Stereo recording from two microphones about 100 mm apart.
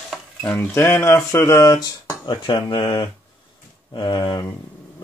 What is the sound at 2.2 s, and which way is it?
Speech, 50° left (ahead or behind).